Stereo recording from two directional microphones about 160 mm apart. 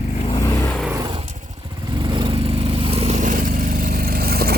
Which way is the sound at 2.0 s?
30° right (ahead or behind).